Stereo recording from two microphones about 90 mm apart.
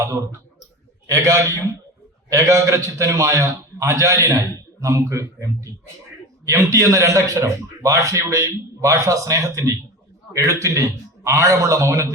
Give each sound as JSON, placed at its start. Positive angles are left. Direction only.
{"t": 0.0, "sound": "a man's voice", "side_deg": -35}